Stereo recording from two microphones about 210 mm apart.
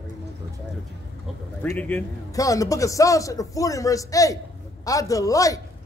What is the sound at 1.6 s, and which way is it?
A man's voice, 5° left (ahead or behind).